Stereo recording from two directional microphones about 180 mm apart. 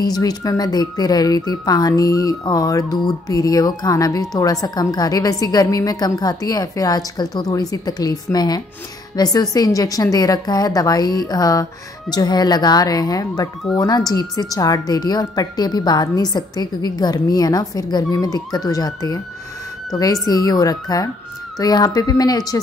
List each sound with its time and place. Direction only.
0.0 s a woman's voice: 20° left (ahead or behind)